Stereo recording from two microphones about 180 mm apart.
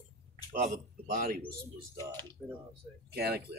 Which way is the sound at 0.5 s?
50° right (ahead or behind).